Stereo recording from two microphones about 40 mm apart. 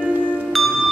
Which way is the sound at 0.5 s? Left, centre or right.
Centre.